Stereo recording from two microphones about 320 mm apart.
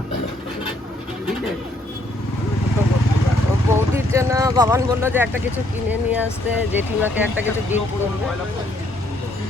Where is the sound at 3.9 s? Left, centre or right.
Centre.